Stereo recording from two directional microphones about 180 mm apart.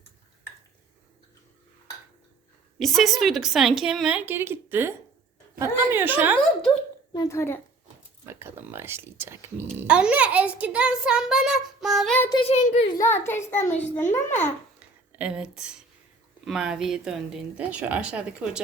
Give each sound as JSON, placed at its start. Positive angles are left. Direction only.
{"t": 2.7, "sound": "a child's voice", "side_deg": 0}
{"t": 7.1, "sound": "a child's voice", "side_deg": 20}
{"t": 8.3, "sound": "a child's voice", "side_deg": -15}
{"t": 12.3, "sound": "a child's voice", "side_deg": 30}
{"t": 13.2, "sound": "a child's voice", "side_deg": 15}
{"t": 15.1, "sound": "a child's voice", "side_deg": -5}